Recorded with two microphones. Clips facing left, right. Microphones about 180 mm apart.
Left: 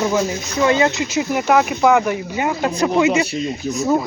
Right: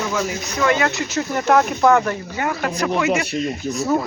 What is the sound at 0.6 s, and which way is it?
Speech, 20° left (ahead or behind).